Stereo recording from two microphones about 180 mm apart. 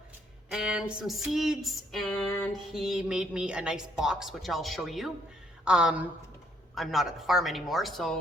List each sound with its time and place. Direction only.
0.5 s speech: 5° right (ahead or behind)